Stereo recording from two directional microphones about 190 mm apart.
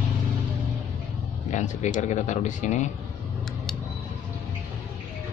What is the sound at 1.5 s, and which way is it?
Speech, 40° left (ahead or behind).